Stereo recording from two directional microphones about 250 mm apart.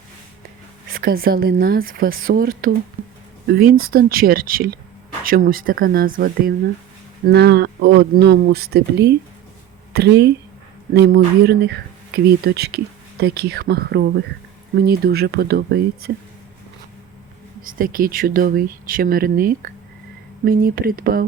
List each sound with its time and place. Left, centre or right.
0.9 s speech: right
17.6 s speech: right